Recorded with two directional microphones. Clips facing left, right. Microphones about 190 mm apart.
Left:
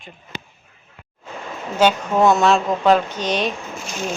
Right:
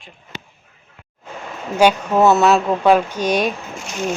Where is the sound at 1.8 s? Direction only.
10° right (ahead or behind).